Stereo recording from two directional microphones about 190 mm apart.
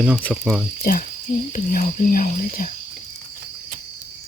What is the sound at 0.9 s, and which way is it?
Speech, 50° left (ahead or behind).